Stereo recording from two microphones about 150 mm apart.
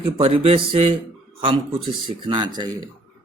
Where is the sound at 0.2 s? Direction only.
40° right (ahead or behind).